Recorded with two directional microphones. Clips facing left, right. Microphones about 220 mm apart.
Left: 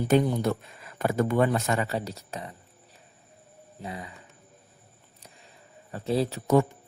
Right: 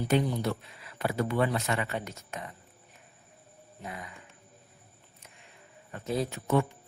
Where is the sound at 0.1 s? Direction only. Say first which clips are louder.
Left 5 dB; 50° left (ahead or behind).